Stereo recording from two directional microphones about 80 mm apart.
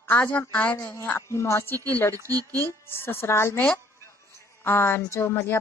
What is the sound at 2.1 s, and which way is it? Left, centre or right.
Speech, right.